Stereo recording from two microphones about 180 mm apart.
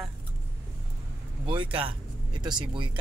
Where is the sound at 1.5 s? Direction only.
30° right (ahead or behind).